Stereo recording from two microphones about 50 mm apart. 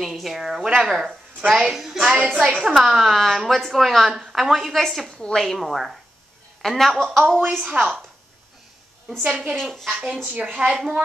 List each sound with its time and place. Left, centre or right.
0.0 s a woman's voice: centre
7.2 s a woman's voice: right
9.2 s a woman's voice: right
9.6 s speech: centre
10.0 s a woman's voice: centre
10.4 s a woman's voice: centre